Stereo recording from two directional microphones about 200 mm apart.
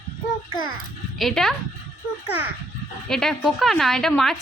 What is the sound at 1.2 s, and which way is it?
Speech, centre (ahead or behind).